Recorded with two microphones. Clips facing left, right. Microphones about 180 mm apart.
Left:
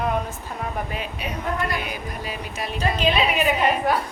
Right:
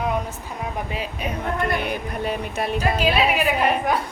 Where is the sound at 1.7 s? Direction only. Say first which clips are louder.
Right 4 dB; 60° right (ahead or behind).